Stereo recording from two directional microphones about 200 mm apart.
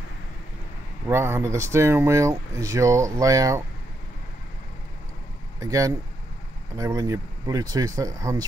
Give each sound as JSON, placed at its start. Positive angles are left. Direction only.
{"t": 1.0, "sound": "speech", "side_deg": -10}
{"t": 5.6, "sound": "speech", "side_deg": -15}